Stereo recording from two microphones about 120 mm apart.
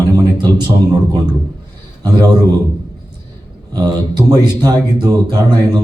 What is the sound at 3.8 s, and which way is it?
A man's voice, 35° right (ahead or behind).